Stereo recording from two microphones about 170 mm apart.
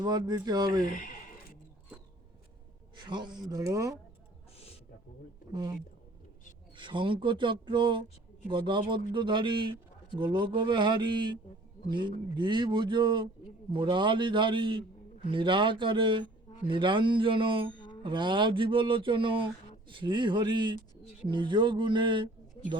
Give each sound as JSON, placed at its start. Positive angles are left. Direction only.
{"t": 0.0, "sound": "speech", "side_deg": -25}
{"t": 2.9, "sound": "speech", "side_deg": -25}
{"t": 6.7, "sound": "speech", "side_deg": -30}